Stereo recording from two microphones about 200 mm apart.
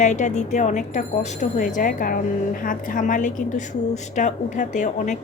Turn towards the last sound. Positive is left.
turn(degrees=35)  # may be behind; listen again after turning